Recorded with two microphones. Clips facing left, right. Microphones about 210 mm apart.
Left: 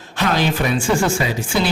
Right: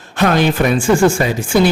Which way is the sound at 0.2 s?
55° right (ahead or behind).